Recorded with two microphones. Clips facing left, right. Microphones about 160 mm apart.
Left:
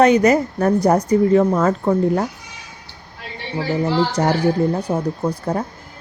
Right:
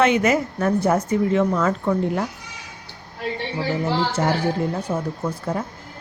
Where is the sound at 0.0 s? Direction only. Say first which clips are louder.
Left 5 dB; 40° left (ahead or behind).